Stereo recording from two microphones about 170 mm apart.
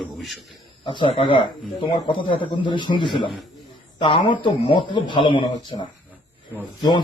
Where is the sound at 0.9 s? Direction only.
30° left (ahead or behind).